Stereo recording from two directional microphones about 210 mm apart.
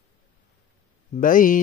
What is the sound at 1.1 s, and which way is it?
Mantra, 40° left (ahead or behind).